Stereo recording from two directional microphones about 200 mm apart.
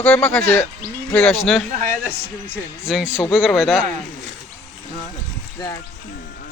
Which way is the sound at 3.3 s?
Centre (ahead or behind).